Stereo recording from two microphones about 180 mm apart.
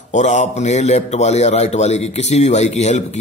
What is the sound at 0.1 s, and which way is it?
A man's voice, 40° left (ahead or behind).